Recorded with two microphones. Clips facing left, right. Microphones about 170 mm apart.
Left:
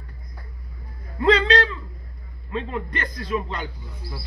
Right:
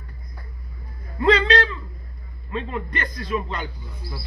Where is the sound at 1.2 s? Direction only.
25° left (ahead or behind).